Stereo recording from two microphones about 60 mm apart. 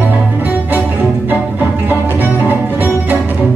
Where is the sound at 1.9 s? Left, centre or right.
Right.